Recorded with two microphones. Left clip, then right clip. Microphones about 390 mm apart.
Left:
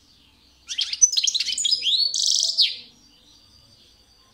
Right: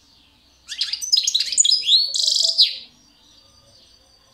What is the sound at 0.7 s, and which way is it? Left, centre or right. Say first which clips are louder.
Bird: left 1 dB; centre.